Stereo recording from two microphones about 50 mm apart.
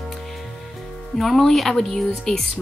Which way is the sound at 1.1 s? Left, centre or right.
Centre.